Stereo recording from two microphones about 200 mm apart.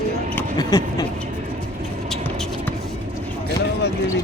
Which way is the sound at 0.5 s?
20° left (ahead or behind).